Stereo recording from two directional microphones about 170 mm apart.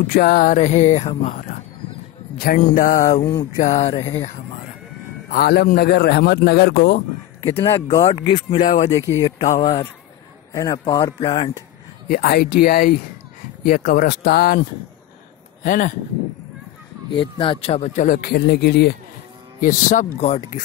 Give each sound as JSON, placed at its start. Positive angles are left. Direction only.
{"t": 0.1, "sound": "speech", "side_deg": 65}
{"t": 2.4, "sound": "speech", "side_deg": 50}
{"t": 3.5, "sound": "a sound", "side_deg": 45}
{"t": 5.3, "sound": "a man's voice", "side_deg": 65}
{"t": 7.6, "sound": "speech", "side_deg": 20}
{"t": 8.5, "sound": "speech", "side_deg": 45}
{"t": 8.9, "sound": "speech", "side_deg": 20}
{"t": 12.1, "sound": "speech", "side_deg": 65}
{"t": 15.6, "sound": "speech", "side_deg": 50}
{"t": 17.2, "sound": "speech", "side_deg": 30}
{"t": 19.6, "sound": "speech", "side_deg": 50}